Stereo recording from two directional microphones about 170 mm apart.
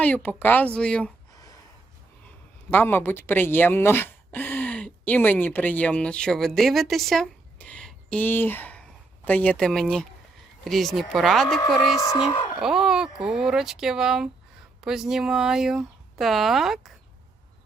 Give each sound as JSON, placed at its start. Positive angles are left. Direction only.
{"t": 0.0, "sound": "speech", "side_deg": 10}
{"t": 1.3, "sound": "a sound", "side_deg": 20}
{"t": 2.2, "sound": "speech", "side_deg": 10}
{"t": 11.9, "sound": "speech", "side_deg": 20}
{"t": 12.2, "sound": "speech", "side_deg": 30}
{"t": 12.5, "sound": "speech", "side_deg": -5}